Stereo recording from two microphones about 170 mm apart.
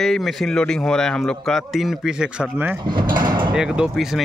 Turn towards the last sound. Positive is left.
turn(degrees=0)  # may be behind; listen again after turning